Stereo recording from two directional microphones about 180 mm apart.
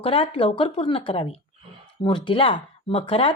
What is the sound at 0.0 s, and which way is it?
Speech, 30° left (ahead or behind).